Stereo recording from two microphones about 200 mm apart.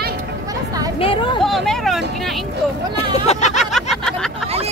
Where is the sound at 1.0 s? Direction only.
25° left (ahead or behind).